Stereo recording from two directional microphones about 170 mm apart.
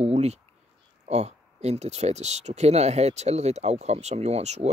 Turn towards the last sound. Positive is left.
turn(degrees=-40)  # may be behind; listen again after turning